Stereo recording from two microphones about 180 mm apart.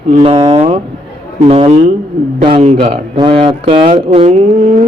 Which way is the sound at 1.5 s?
35° right (ahead or behind).